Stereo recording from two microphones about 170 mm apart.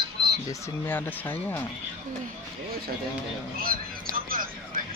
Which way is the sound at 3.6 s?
55° right (ahead or behind).